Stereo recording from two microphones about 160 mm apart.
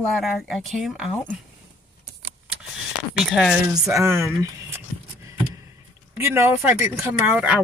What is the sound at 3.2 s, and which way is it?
Speech, centre (ahead or behind).